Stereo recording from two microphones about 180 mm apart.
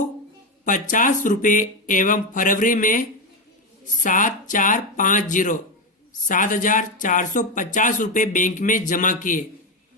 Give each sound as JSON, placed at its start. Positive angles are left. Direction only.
{"t": 0.6, "sound": "speech", "side_deg": 45}